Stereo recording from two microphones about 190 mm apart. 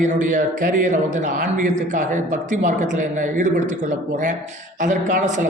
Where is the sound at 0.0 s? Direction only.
40° right (ahead or behind).